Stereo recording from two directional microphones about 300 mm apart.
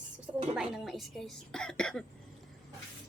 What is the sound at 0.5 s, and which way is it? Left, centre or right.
Speech, centre.